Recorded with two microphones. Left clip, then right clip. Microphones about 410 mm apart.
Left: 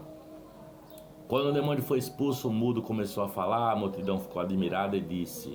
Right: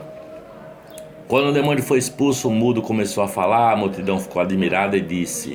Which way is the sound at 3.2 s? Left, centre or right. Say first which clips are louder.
Right 12 dB; left.